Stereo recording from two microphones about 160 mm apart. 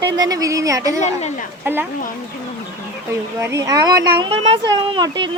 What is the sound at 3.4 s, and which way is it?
Speech, 20° right (ahead or behind).